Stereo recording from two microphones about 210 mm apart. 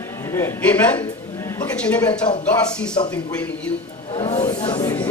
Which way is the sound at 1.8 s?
5° left (ahead or behind).